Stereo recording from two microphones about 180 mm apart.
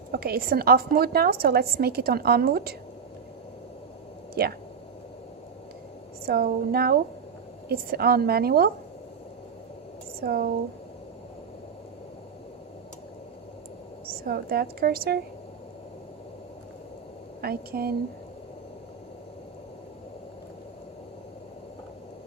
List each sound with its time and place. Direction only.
0.1 s a woman's voice: 60° right (ahead or behind)
4.4 s a woman's voice: 60° right (ahead or behind)
6.2 s a woman's voice: 55° right (ahead or behind)
10.2 s a woman's voice: 55° right (ahead or behind)
14.1 s a woman's voice: 60° right (ahead or behind)
17.4 s a woman's voice: 55° right (ahead or behind)